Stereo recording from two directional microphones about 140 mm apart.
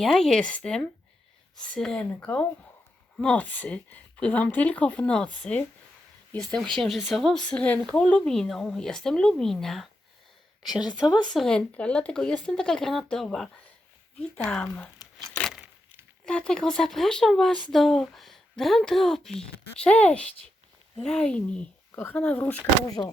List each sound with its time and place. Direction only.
0.0 s speech: 5° left (ahead or behind)
11.0 s speech: 30° left (ahead or behind)
11.3 s speech: 5° left (ahead or behind)
14.9 s tearing: centre (ahead or behind)
16.2 s speech: 5° left (ahead or behind)
23.0 s speech: 30° left (ahead or behind)